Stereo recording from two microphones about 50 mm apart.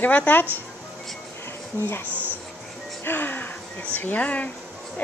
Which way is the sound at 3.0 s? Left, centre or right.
Left.